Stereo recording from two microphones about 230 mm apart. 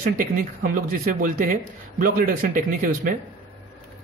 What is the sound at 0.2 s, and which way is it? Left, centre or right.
A man's voice, right.